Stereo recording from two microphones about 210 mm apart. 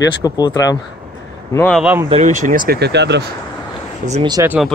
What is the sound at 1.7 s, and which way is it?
Speech, centre (ahead or behind).